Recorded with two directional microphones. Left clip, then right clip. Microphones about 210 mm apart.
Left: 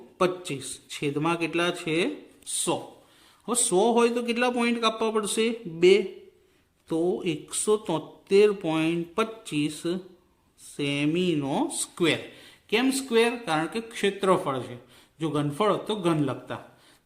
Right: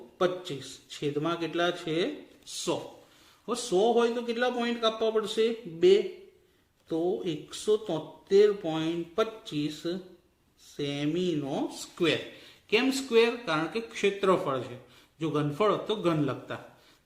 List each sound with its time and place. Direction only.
0.2 s a man's voice: 40° left (ahead or behind)